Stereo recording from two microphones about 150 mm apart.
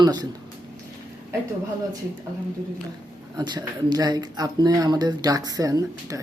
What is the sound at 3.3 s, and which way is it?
Speech, 30° right (ahead or behind).